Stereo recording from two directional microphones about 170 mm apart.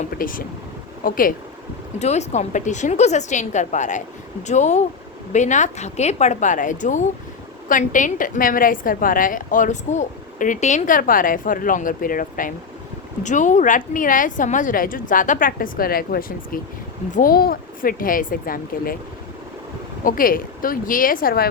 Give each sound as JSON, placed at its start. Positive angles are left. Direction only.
{"t": 0.2, "sound": "speech", "side_deg": 55}
{"t": 2.0, "sound": "a woman's voice", "side_deg": 40}
{"t": 20.1, "sound": "speech", "side_deg": 55}